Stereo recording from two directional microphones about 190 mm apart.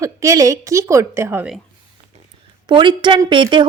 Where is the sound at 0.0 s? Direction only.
15° right (ahead or behind).